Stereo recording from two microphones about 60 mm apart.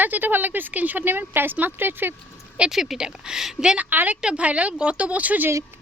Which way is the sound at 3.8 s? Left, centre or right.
Right.